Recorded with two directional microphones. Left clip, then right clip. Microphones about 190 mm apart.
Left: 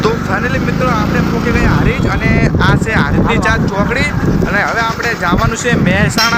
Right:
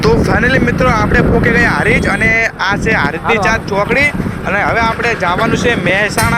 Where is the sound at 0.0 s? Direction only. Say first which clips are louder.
Right 3 dB; 20° right (ahead or behind).